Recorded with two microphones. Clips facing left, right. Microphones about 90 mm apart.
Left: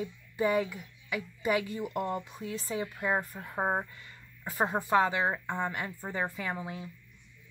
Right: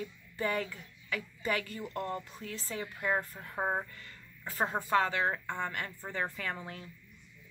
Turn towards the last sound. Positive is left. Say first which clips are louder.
# left 3 dB
turn(degrees=15)  # may be behind; listen again after turning